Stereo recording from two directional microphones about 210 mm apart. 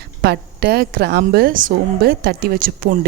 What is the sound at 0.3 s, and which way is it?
A woman's voice, 50° right (ahead or behind).